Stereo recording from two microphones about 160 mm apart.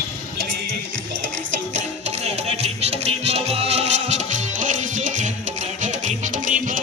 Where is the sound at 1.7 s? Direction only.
45° right (ahead or behind).